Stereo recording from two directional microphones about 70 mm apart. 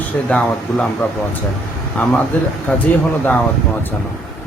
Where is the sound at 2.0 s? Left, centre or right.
Centre.